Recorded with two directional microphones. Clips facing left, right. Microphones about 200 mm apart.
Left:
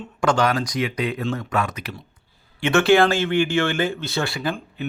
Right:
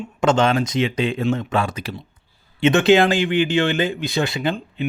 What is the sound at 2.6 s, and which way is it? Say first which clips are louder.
Speech: right 2 dB; 20° right (ahead or behind).